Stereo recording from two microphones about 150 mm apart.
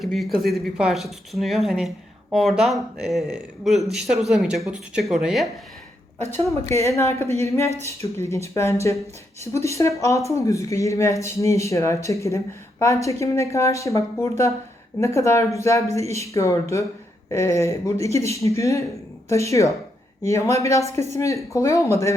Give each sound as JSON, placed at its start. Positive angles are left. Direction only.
{"t": 0.0, "sound": "speech", "side_deg": 0}
{"t": 6.3, "sound": "speech", "side_deg": 20}